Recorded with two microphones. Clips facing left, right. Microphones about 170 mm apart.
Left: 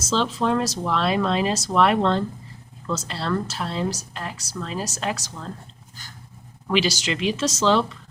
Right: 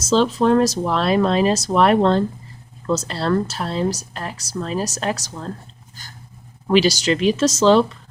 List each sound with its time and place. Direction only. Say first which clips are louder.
0.1 s a woman's voice: right 7 dB; 45° right (ahead or behind)
6.7 s a woman's voice: right 7 dB; 40° right (ahead or behind)